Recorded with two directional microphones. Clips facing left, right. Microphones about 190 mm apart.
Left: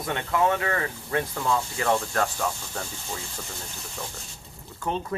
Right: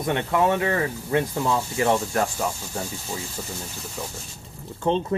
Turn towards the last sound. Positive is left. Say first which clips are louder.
# right 7 dB
turn(degrees=-25)  # may be behind; listen again after turning